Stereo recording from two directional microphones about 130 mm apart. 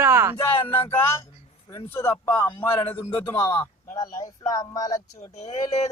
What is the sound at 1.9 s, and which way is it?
A man's voice, 20° left (ahead or behind).